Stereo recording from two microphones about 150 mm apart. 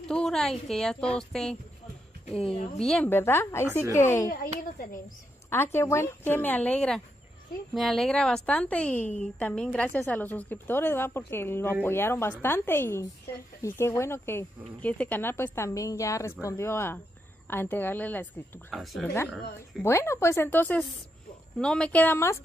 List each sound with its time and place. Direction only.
0.1 s a woman's voice: 5° left (ahead or behind)
2.8 s a woman's voice: 5° left (ahead or behind)
4.3 s speech: 75° left (ahead or behind)
5.5 s a woman's voice: 15° left (ahead or behind)
18.7 s a woman's voice: centre (ahead or behind)
19.8 s a woman's voice: 15° left (ahead or behind)